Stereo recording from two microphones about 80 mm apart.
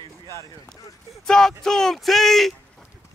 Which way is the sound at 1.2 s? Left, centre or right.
Centre.